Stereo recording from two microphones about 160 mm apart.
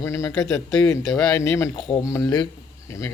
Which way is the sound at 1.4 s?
20° left (ahead or behind).